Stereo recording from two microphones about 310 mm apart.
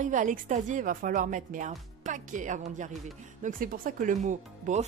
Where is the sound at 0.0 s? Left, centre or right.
Right.